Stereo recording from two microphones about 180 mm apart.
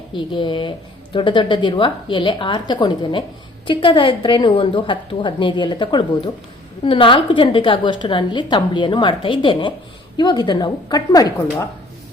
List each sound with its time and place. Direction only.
0.1 s a woman's voice: 25° left (ahead or behind)